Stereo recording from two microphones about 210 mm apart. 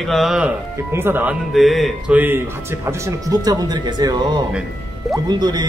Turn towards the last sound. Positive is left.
turn(degrees=-20)  # may be behind; listen again after turning